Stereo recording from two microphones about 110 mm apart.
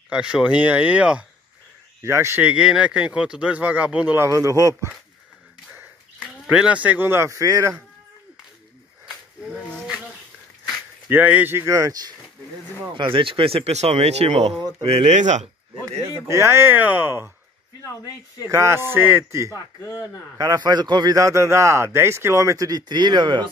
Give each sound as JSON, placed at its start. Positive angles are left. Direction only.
{"t": 0.1, "sound": "speech", "side_deg": -10}
{"t": 2.0, "sound": "speech", "side_deg": -25}
{"t": 2.4, "sound": "speech", "side_deg": -5}
{"t": 4.2, "sound": "speech", "side_deg": -30}
{"t": 6.4, "sound": "speech", "side_deg": -5}
{"t": 9.6, "sound": "a sound", "side_deg": 10}
{"t": 11.1, "sound": "speech", "side_deg": -15}
{"t": 12.9, "sound": "speech", "side_deg": -50}
{"t": 16.3, "sound": "speech", "side_deg": -25}
{"t": 18.5, "sound": "speech", "side_deg": -25}
{"t": 20.3, "sound": "a man's voice", "side_deg": -35}